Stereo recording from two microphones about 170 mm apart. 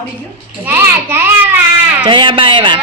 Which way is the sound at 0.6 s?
10° right (ahead or behind).